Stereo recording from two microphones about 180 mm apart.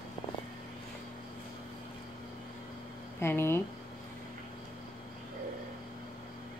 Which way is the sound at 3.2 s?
10° left (ahead or behind).